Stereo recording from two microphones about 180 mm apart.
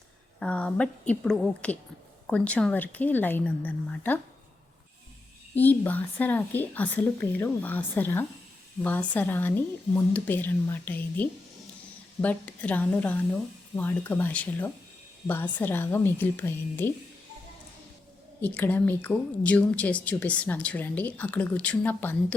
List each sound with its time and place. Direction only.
0.3 s a woman's voice: 5° left (ahead or behind)
5.5 s a woman's voice: 10° left (ahead or behind)
18.4 s a woman's voice: 10° left (ahead or behind)